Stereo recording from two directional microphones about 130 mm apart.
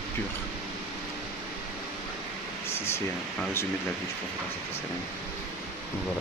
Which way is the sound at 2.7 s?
20° left (ahead or behind).